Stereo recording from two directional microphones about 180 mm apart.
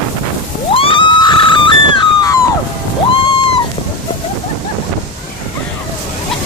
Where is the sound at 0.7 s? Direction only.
30° left (ahead or behind).